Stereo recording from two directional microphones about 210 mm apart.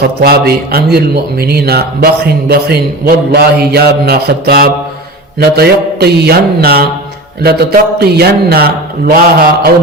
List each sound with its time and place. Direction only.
0.0 s a man's voice: 50° right (ahead or behind)